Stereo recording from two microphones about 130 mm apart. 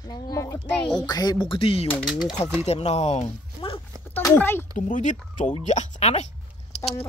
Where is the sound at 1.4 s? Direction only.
45° left (ahead or behind).